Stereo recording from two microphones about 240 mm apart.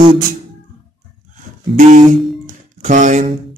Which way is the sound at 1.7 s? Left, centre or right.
Right.